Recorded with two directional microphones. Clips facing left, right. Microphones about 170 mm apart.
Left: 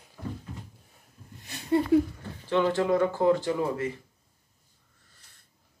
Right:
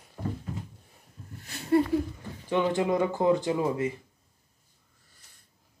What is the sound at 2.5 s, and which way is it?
Speech, 15° right (ahead or behind).